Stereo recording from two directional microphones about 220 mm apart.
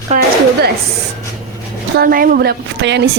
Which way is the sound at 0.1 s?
35° right (ahead or behind).